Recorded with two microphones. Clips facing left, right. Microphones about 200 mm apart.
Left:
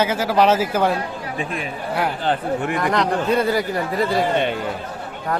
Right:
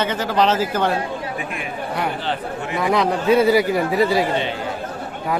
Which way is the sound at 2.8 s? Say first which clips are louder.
Right 5 dB; 5° right (ahead or behind).